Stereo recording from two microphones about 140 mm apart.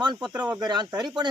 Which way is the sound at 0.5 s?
30° right (ahead or behind).